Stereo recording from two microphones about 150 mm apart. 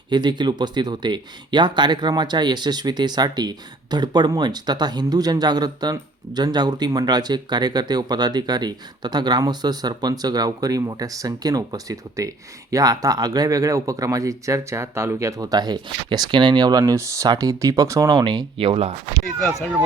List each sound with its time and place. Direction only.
0.1 s speech: 30° right (ahead or behind)